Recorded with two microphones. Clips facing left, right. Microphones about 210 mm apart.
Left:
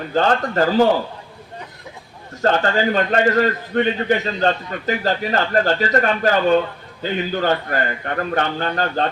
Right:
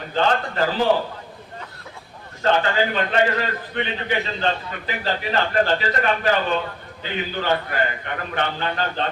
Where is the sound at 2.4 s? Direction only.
45° left (ahead or behind).